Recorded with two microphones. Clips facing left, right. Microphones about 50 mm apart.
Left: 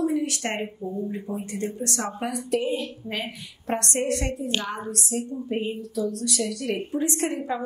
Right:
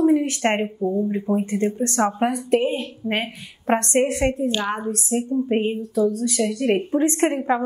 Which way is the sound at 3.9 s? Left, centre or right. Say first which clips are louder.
Right 7 dB; right.